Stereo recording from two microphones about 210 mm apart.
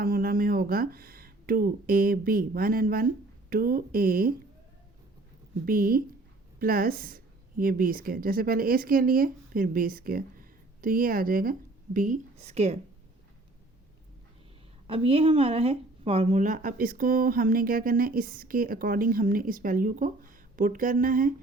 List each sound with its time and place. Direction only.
0.0 s a woman's voice: 45° right (ahead or behind)
5.6 s a woman's voice: 45° right (ahead or behind)
14.8 s speech: 25° right (ahead or behind)